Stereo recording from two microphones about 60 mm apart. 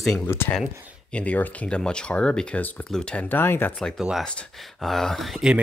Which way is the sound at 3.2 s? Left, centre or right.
Left.